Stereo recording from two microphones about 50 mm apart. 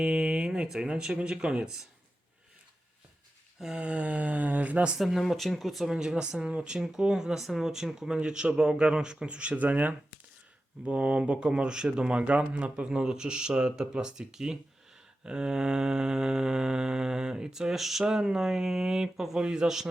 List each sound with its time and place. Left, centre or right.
0.0 s speech: centre
3.8 s speech: right
4.9 s speech: centre
5.9 s speech: centre